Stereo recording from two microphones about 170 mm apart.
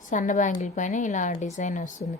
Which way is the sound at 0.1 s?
50° left (ahead or behind).